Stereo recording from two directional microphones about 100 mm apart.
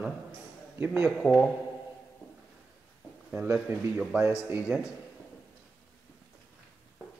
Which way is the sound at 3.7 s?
25° right (ahead or behind).